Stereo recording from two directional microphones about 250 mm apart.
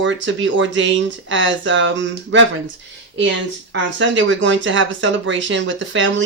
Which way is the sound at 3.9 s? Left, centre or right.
Right.